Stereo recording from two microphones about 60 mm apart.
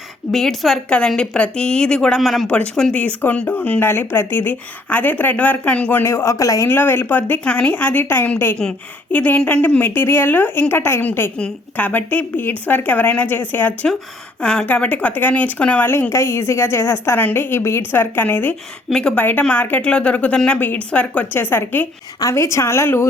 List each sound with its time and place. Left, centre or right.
0.3 s a woman's voice: centre
0.9 s speech: centre
2.5 s speech: centre
3.8 s speech: left
6.0 s speech: left
6.7 s speech: left
11.8 s speech: left
14.4 s speech: centre
14.7 s speech: left
15.9 s a woman's voice: left
17.9 s speech: left; by 20.6 s centre
20.6 s speech: left
21.5 s speech: left
22.4 s a woman's voice: left